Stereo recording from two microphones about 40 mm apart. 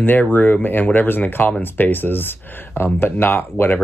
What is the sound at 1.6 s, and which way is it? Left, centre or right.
Speech, left.